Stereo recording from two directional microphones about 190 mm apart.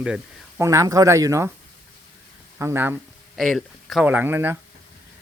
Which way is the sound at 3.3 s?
Centre (ahead or behind).